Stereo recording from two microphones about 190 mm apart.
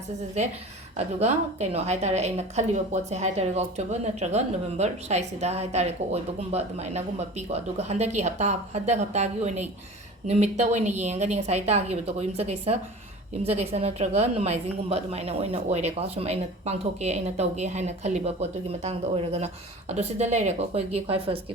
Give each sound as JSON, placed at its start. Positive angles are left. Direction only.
{"t": 0.9, "sound": "a woman's voice", "side_deg": -35}